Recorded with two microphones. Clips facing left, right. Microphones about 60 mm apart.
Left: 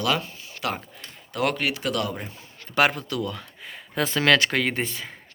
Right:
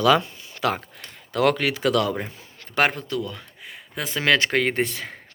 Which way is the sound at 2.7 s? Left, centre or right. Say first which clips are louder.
Even; right.